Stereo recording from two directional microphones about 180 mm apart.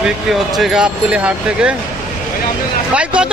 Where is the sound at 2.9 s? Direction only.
5° right (ahead or behind).